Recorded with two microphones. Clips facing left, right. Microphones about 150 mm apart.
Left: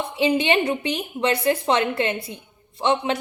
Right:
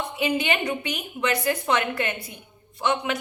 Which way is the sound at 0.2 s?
30° left (ahead or behind).